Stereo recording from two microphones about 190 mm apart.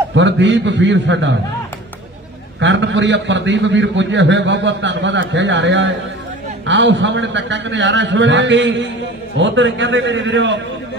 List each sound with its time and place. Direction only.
0.1 s a man's voice: 75° right (ahead or behind)
2.6 s a man's voice: 70° right (ahead or behind)